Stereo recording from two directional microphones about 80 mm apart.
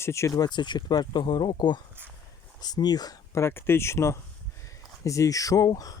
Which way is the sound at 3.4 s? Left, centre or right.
Left.